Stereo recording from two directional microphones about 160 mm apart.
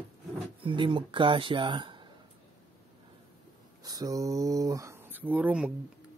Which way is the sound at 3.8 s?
20° right (ahead or behind).